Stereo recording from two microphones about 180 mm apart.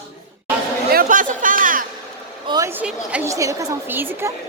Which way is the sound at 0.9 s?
45° right (ahead or behind).